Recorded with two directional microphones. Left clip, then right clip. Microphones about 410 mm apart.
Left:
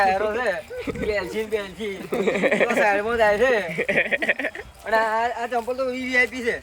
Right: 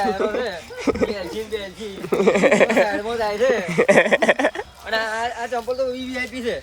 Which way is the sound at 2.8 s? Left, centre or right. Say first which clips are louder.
Left 4 dB; centre.